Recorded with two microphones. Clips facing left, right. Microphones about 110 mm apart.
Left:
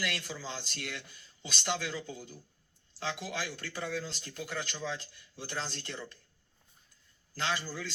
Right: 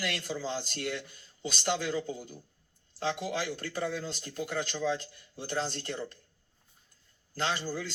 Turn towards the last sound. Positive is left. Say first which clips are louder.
# right 2 dB
turn(degrees=-45)  # may be behind; listen again after turning